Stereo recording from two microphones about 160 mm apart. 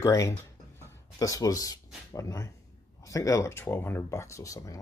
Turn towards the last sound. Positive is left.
turn(degrees=20)  # may be behind; listen again after turning